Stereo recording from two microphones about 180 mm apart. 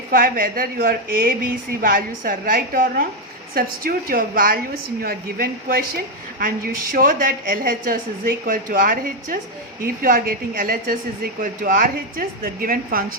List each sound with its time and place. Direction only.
0.1 s a woman's voice: 50° right (ahead or behind)